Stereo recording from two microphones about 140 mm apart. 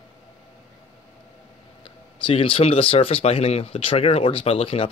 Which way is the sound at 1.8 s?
40° left (ahead or behind).